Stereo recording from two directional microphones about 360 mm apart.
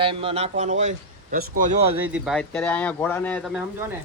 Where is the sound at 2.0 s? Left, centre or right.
Centre.